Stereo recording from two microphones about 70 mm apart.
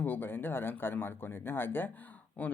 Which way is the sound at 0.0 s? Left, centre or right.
Left.